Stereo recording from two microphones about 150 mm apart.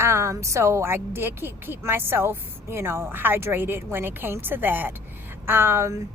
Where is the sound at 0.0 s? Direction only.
20° right (ahead or behind).